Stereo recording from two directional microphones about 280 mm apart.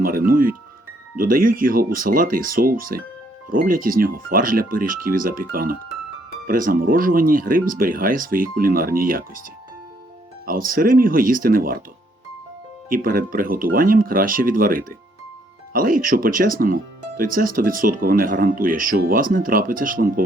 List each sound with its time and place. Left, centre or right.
0.0 s speech: right
10.4 s speech: right
12.9 s speech: right